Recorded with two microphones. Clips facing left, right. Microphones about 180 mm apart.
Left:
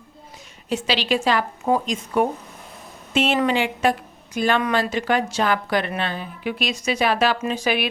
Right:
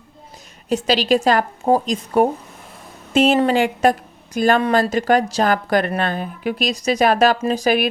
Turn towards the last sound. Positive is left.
turn(degrees=-40)  # may be behind; listen again after turning